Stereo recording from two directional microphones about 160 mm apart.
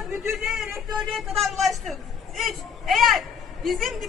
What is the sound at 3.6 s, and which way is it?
Speech, centre (ahead or behind).